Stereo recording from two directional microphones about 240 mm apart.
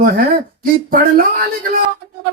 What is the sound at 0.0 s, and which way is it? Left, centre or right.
Speech, right.